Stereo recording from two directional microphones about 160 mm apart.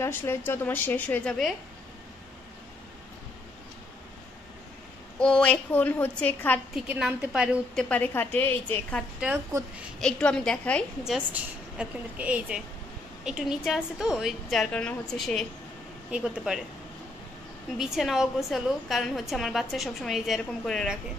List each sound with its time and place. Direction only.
0.0 s a child's voice: 15° left (ahead or behind)
5.2 s a child's voice: 5° left (ahead or behind)
6.7 s a woman's voice: 5° right (ahead or behind)
7.7 s a child's voice: 10° left (ahead or behind)
11.1 s a woman's voice: 5° right (ahead or behind)
17.7 s a woman's voice: centre (ahead or behind)